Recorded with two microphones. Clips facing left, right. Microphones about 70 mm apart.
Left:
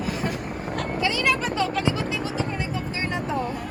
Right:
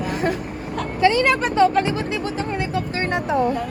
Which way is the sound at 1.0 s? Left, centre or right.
Right.